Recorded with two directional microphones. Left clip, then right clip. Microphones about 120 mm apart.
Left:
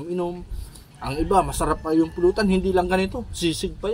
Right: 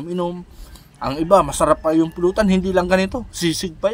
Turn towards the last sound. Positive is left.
turn(degrees=-30)  # may be behind; listen again after turning